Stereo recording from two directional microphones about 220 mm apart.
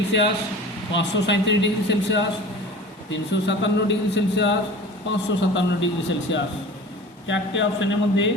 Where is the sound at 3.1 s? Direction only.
55° left (ahead or behind).